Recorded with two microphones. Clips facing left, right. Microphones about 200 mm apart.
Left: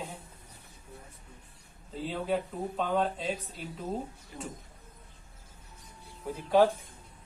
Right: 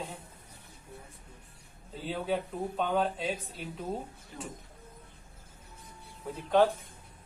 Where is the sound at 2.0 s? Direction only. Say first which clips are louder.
Left 1 dB; centre (ahead or behind).